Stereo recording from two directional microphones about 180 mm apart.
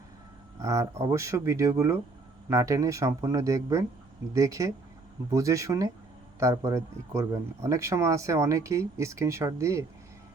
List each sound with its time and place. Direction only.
0.6 s speech: 15° right (ahead or behind)